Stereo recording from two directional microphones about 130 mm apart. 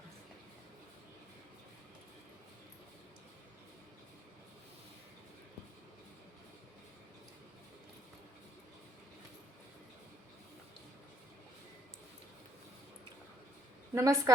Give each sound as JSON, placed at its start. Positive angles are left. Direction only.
{"t": 13.9, "sound": "a woman's voice", "side_deg": -25}